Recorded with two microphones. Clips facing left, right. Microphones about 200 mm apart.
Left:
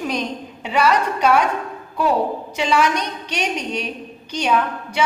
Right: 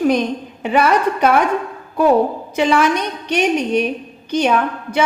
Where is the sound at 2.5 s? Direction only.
50° right (ahead or behind).